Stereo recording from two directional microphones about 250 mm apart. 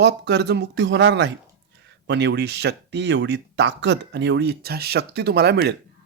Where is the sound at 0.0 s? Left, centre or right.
Right.